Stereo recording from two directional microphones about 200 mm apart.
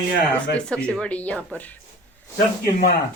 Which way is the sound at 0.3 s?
5° left (ahead or behind).